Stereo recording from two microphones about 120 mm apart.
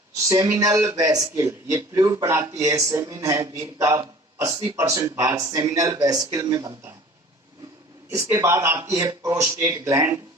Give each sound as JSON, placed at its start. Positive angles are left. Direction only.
{"t": 0.3, "sound": "speech", "side_deg": -25}
{"t": 8.1, "sound": "speech", "side_deg": -25}